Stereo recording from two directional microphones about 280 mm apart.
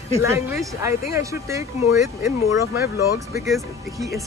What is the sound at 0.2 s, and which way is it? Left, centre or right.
Speech, centre.